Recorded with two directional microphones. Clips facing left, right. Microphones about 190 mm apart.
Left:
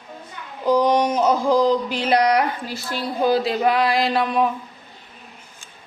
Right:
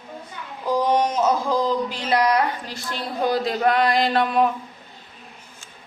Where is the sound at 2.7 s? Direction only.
5° left (ahead or behind).